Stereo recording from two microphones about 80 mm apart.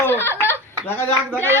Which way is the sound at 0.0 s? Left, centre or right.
Left.